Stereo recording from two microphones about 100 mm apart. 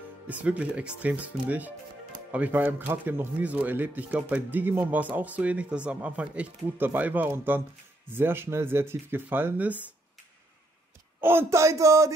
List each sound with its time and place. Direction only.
0.3 s speech: 15° right (ahead or behind)
11.1 s speech: 25° right (ahead or behind)